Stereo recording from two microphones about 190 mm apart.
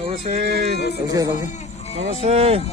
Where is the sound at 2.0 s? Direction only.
35° right (ahead or behind).